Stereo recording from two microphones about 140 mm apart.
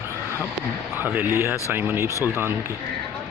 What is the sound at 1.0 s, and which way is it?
Speech, 15° right (ahead or behind).